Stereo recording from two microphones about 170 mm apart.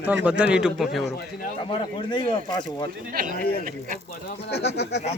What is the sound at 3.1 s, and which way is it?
Speech, 55° right (ahead or behind).